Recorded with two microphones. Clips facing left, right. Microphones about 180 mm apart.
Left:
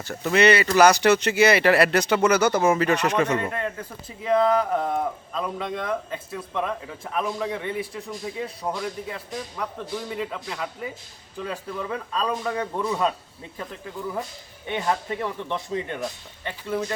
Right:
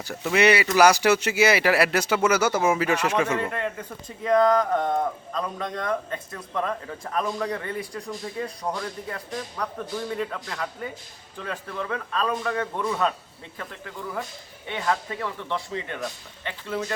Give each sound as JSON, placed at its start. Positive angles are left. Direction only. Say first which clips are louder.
{"t": 0.1, "sound": "speech", "louder": "left 1 dB", "side_deg": -5}
{"t": 3.3, "sound": "a man's voice", "louder": "left 1 dB", "side_deg": 10}
{"t": 14.7, "sound": "a man's voice", "louder": "left 1 dB", "side_deg": 20}